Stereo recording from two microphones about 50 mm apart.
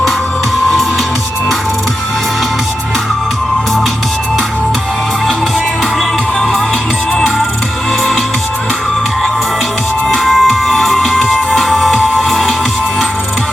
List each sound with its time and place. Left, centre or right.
10.1 s music: centre